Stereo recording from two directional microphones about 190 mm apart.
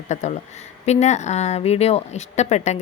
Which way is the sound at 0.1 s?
35° left (ahead or behind).